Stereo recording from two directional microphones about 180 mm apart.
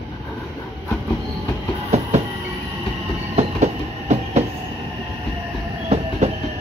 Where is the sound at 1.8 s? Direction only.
40° right (ahead or behind).